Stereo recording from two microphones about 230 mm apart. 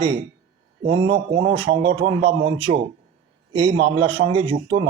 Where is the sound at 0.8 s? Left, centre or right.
Right.